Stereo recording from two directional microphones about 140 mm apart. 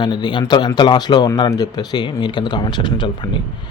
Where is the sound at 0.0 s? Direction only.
30° left (ahead or behind).